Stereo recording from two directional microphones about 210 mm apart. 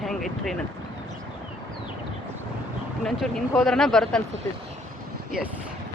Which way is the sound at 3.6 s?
Centre (ahead or behind).